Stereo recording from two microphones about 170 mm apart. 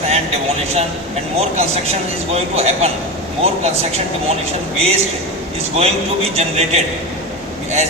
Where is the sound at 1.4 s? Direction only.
35° right (ahead or behind).